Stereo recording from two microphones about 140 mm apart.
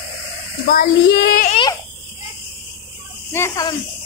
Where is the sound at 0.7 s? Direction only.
90° left.